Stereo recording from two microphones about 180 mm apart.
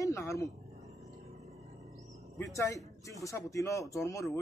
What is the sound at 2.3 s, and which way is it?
A man's voice, 15° left (ahead or behind).